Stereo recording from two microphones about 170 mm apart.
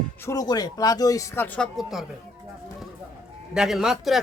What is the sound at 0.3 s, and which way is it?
Speech, 20° left (ahead or behind).